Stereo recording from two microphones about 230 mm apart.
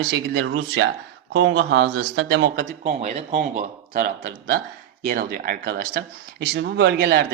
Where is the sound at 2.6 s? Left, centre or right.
Right.